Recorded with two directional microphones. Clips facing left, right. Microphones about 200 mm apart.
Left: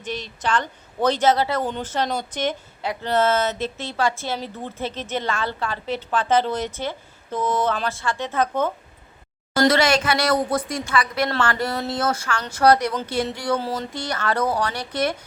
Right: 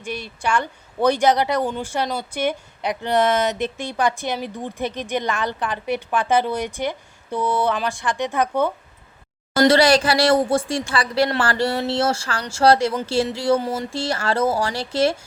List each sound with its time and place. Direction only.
0.0 s speech: 10° right (ahead or behind)
9.6 s speech: 35° right (ahead or behind)
11.4 s a sound: 30° right (ahead or behind)